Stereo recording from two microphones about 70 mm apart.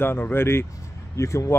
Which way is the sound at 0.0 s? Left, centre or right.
Left.